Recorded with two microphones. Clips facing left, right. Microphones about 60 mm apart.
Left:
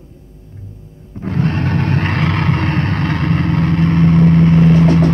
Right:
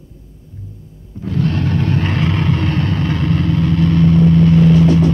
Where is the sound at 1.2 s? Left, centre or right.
Left.